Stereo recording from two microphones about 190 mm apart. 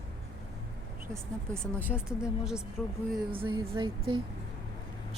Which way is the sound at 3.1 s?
25° right (ahead or behind).